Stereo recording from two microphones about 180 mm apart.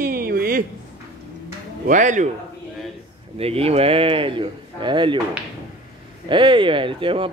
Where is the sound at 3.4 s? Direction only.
35° right (ahead or behind).